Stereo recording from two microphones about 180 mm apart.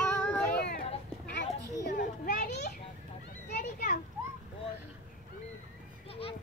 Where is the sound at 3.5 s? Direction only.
60° left (ahead or behind).